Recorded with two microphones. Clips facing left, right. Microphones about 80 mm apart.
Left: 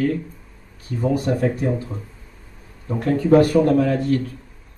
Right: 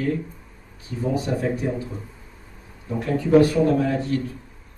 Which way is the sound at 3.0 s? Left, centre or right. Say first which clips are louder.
Left 2 dB; left.